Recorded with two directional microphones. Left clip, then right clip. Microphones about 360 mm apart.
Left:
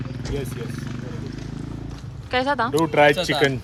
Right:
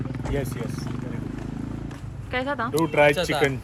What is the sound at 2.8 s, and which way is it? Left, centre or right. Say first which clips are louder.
Speech: left 2 dB; left.